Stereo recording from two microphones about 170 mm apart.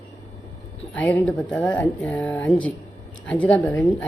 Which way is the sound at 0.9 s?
10° left (ahead or behind).